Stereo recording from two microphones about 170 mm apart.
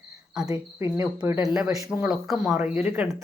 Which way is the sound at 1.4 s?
5° right (ahead or behind).